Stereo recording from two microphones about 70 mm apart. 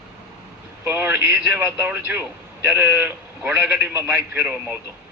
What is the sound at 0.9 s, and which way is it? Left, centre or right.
Speech, right.